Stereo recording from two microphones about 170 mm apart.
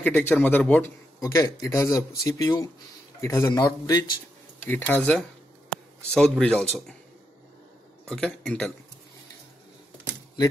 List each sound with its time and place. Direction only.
0.0 s speech: 10° left (ahead or behind)
1.2 s a man's voice: 20° left (ahead or behind)
4.6 s speech: 10° left (ahead or behind)
8.1 s speech: 5° left (ahead or behind)